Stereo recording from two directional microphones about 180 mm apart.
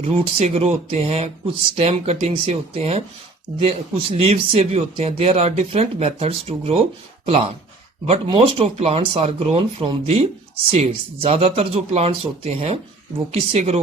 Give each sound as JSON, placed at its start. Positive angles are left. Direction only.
{"t": 0.0, "sound": "a man's voice", "side_deg": -35}
{"t": 8.0, "sound": "a man's voice", "side_deg": -30}